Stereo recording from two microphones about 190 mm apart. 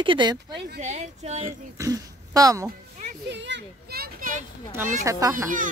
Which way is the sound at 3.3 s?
65° right (ahead or behind).